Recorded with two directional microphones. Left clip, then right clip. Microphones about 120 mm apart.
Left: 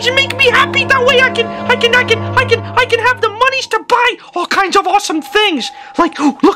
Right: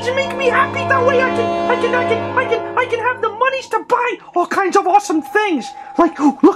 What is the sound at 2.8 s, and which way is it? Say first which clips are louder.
Speech: left 8 dB; 60° left (ahead or behind).